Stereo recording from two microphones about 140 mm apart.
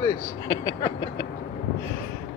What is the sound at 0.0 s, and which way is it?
Speech, 25° left (ahead or behind).